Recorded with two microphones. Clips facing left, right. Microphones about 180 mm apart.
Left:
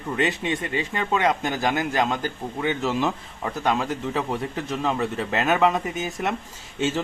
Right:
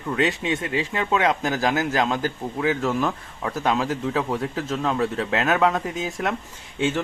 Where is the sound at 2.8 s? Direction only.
20° left (ahead or behind).